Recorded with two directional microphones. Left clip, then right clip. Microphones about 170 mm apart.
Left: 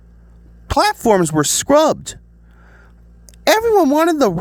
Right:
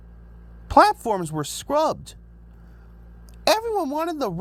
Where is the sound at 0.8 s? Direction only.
50° left (ahead or behind).